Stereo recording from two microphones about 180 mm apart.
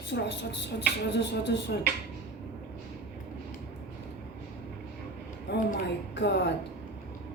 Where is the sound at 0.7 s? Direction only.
75° left (ahead or behind).